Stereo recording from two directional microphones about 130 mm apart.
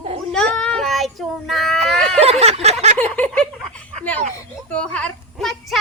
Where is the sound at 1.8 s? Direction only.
5° left (ahead or behind).